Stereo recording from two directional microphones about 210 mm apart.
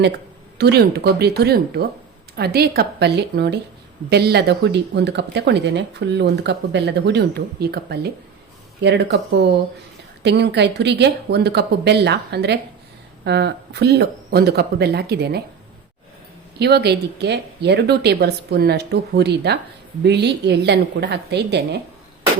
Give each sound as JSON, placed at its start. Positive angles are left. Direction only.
{"t": 0.6, "sound": "speech", "side_deg": -50}
{"t": 16.6, "sound": "speech", "side_deg": -50}